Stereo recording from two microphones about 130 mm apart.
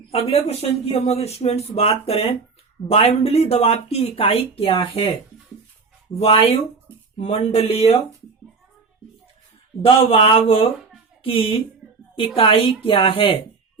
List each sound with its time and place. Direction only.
0.1 s speech: 50° left (ahead or behind)
4.7 s speech: 35° left (ahead or behind)
6.1 s speech: 50° left (ahead or behind)
9.8 s speech: 45° left (ahead or behind)